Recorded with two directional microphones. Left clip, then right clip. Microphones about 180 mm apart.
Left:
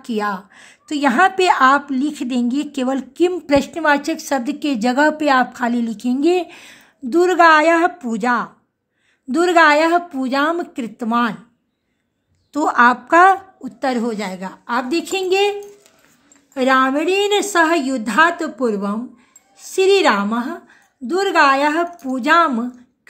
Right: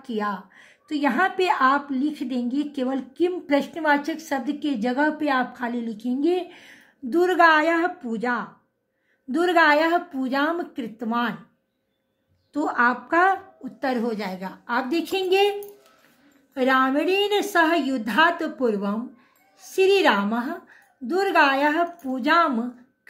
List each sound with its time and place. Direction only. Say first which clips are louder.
0.0 s a woman's voice: left 6 dB; 45° left (ahead or behind)
12.5 s a woman's voice: left 8 dB; 40° left (ahead or behind); by 15.5 s 20° left (ahead or behind)
16.5 s a woman's voice: left 5 dB; 30° left (ahead or behind)